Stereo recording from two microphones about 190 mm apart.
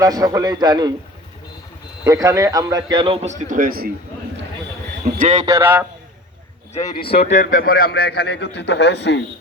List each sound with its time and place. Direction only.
0.0 s a man's voice: 20° right (ahead or behind)
2.0 s a man's voice: 15° right (ahead or behind); by 3.9 s 50° right (ahead or behind)
5.0 s speech: 45° right (ahead or behind)
5.3 s speech: 20° right (ahead or behind)
7.3 s a man's voice: 40° left (ahead or behind); by 9.2 s 65° left (ahead or behind)